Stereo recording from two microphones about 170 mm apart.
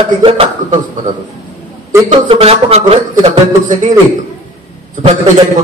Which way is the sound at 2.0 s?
35° right (ahead or behind).